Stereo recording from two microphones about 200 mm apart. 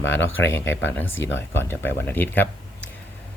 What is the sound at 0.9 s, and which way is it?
Speech, 10° left (ahead or behind).